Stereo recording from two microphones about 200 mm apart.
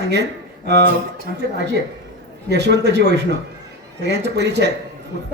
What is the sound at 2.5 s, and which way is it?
Speech, 55° right (ahead or behind).